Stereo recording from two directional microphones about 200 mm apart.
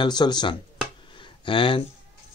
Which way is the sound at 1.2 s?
25° left (ahead or behind).